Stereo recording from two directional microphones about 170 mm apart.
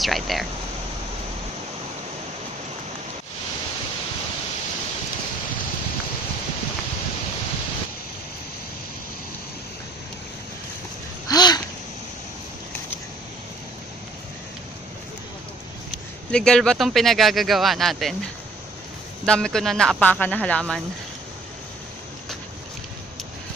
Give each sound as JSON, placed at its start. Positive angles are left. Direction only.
{"t": 0.0, "sound": "speech", "side_deg": 0}
{"t": 11.3, "sound": "a sound", "side_deg": 25}
{"t": 16.3, "sound": "speech", "side_deg": 5}
{"t": 19.2, "sound": "speech", "side_deg": 5}